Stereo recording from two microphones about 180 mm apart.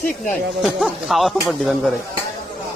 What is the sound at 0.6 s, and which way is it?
Speech, 5° right (ahead or behind).